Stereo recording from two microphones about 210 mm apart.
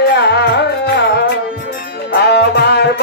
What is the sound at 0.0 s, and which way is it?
Music, 55° left (ahead or behind).